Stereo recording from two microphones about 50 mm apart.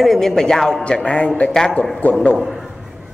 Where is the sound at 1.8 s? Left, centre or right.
Left.